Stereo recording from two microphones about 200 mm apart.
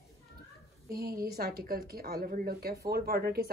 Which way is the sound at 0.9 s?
50° right (ahead or behind).